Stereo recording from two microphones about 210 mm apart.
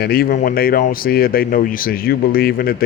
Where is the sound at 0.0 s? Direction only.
45° left (ahead or behind).